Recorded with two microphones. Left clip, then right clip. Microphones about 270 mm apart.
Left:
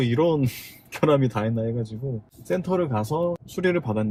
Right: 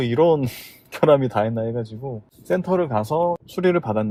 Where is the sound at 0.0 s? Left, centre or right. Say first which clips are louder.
Right 5 dB; right.